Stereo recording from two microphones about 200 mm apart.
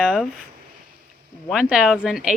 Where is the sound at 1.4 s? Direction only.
5° right (ahead or behind).